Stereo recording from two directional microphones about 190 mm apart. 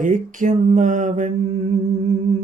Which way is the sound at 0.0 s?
45° right (ahead or behind).